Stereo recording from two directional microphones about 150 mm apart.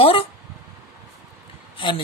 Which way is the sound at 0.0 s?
40° left (ahead or behind).